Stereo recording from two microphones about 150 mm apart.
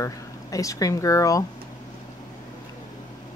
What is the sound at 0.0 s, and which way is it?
Speech, 20° left (ahead or behind).